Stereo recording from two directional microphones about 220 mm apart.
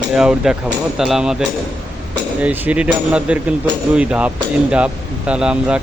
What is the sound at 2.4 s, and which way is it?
Speech, 5° right (ahead or behind).